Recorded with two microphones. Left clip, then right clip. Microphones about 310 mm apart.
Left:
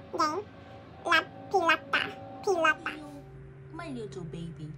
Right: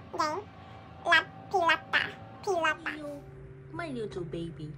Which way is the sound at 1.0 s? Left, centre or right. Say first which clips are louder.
Right 1 dB; centre.